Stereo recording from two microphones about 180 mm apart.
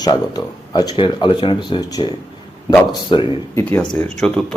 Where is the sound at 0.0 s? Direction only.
20° left (ahead or behind).